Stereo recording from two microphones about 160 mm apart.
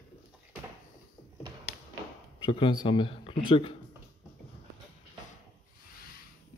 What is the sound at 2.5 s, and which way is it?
Speech, 30° left (ahead or behind).